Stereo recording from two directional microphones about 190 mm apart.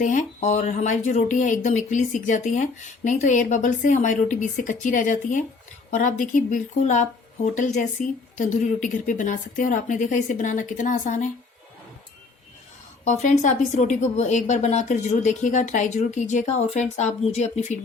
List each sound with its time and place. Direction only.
0.0 s a woman's voice: 40° left (ahead or behind)
13.1 s speech: 40° left (ahead or behind)